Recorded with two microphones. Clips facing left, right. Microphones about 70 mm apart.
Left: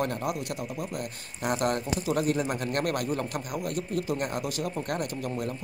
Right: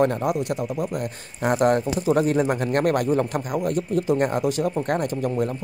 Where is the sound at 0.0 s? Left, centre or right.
Right.